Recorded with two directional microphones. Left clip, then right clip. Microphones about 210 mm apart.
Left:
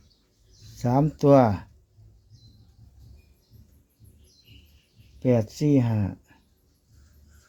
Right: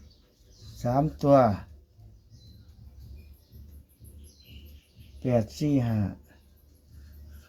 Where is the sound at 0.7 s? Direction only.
55° left (ahead or behind).